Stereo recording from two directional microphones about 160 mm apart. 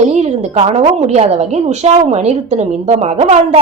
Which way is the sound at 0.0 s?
45° right (ahead or behind).